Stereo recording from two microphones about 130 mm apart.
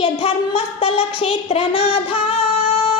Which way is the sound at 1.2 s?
40° left (ahead or behind).